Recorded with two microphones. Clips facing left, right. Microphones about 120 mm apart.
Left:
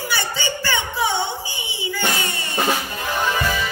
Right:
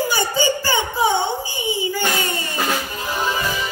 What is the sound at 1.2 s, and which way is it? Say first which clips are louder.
Speech: right 5 dB; 45° right (ahead or behind).